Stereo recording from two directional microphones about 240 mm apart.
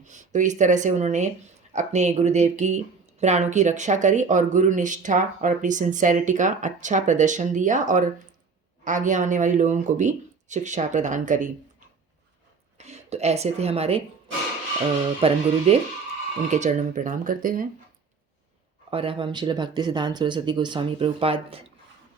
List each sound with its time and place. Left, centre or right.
0.0 s speech: right
12.7 s speech: right
15.0 s speech: right
18.9 s speech: right